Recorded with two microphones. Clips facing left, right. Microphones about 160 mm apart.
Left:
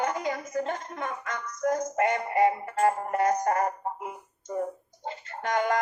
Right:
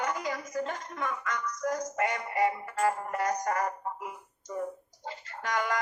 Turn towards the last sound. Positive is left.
turn(degrees=25)  # may be behind; listen again after turning